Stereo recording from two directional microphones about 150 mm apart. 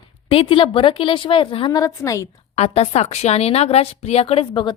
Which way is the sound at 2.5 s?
45° left (ahead or behind).